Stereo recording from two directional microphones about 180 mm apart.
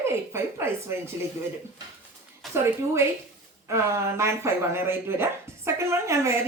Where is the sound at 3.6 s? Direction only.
15° right (ahead or behind).